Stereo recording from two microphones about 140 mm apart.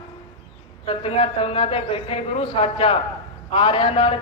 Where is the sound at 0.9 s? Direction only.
40° left (ahead or behind).